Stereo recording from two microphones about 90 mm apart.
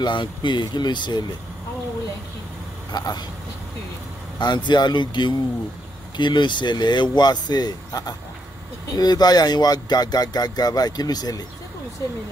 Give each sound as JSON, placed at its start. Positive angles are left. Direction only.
{"t": 0.0, "sound": "speech", "side_deg": 60}
{"t": 2.9, "sound": "speech", "side_deg": 50}
{"t": 4.4, "sound": "speech", "side_deg": 55}